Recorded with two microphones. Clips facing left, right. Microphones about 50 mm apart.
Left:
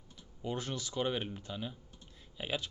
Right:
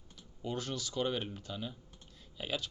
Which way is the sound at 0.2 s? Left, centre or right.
Left.